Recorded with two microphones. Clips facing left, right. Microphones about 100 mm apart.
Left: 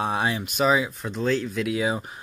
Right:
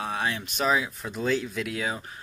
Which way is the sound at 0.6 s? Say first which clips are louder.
Left 4 dB; 5° left (ahead or behind).